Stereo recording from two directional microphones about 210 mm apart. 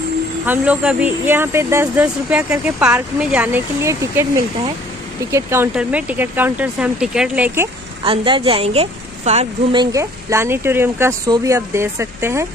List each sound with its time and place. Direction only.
0.5 s a woman's voice: 5° right (ahead or behind)
8.0 s a woman's voice: 25° right (ahead or behind)